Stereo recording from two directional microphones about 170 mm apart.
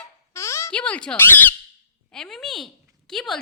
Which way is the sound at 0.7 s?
5° left (ahead or behind).